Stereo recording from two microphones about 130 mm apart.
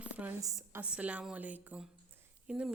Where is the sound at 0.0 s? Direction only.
10° right (ahead or behind).